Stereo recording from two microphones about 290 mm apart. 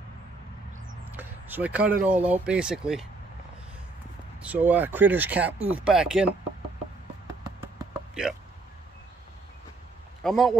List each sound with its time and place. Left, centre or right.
1.1 s speech: centre
4.4 s speech: centre
8.1 s hiccup: centre
10.2 s speech: centre